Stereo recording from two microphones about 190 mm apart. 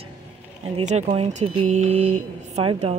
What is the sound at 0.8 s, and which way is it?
Speech, 35° right (ahead or behind).